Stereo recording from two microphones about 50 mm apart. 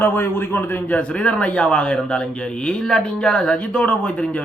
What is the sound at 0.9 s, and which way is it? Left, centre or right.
Speech, left.